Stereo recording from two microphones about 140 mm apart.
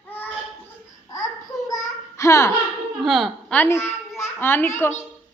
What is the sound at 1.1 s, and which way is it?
Babbling, 25° left (ahead or behind).